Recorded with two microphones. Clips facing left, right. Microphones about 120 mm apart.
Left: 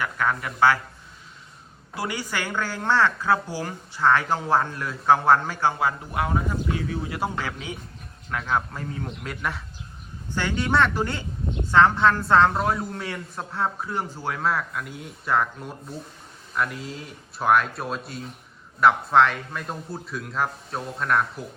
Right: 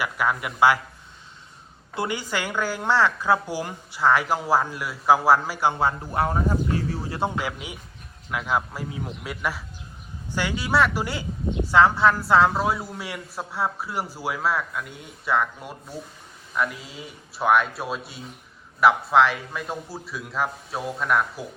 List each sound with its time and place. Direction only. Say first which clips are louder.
0.0 s a woman's voice: right 1 dB; 10° right (ahead or behind)
2.0 s a woman's voice: right 2 dB; 20° right (ahead or behind)
5.8 s speech: right 2 dB; 30° right (ahead or behind)
6.7 s a sound: right 1 dB; 35° right (ahead or behind)
7.3 s a woman's voice: right 1 dB; 15° right (ahead or behind)